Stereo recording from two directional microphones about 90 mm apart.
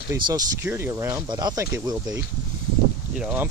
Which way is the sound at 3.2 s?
15° right (ahead or behind).